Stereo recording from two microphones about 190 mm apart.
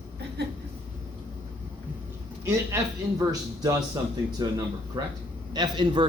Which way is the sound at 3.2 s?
15° right (ahead or behind).